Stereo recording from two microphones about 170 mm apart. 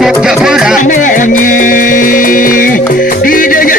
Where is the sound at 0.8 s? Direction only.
50° left (ahead or behind).